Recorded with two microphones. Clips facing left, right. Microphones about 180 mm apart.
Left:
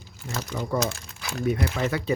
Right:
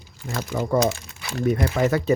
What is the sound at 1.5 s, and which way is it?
Speech, 45° right (ahead or behind).